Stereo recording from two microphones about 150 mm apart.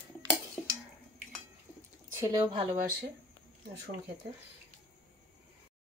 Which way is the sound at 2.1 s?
20° right (ahead or behind).